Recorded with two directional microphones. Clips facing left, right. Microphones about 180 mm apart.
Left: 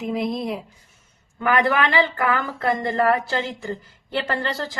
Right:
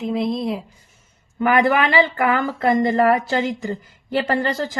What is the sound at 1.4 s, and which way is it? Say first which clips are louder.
Speech: right 3 dB; 15° right (ahead or behind).